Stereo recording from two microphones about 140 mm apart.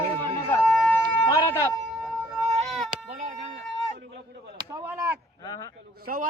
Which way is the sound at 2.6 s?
5° left (ahead or behind).